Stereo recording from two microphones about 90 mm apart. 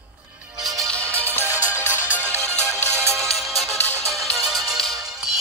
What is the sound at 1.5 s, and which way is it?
Music, 20° right (ahead or behind).